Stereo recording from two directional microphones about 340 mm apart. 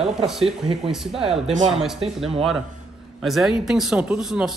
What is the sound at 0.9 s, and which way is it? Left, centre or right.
Speech, centre.